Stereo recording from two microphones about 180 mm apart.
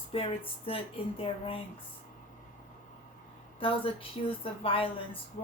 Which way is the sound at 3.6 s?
30° left (ahead or behind).